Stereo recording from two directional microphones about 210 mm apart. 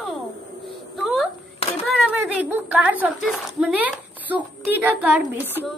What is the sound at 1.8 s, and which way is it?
Speech, 5° right (ahead or behind).